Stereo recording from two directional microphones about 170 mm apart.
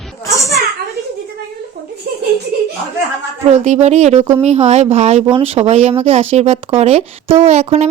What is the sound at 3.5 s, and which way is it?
Speech, 40° right (ahead or behind).